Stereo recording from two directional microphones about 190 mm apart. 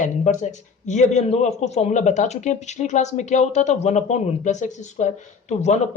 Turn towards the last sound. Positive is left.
turn(degrees=35)  # may be behind; listen again after turning